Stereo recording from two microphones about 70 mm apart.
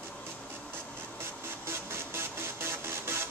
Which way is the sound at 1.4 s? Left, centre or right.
Right.